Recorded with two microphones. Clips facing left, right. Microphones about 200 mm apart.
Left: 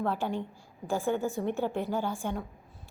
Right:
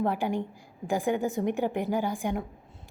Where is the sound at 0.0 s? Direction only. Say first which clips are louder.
Right 3 dB; 15° right (ahead or behind).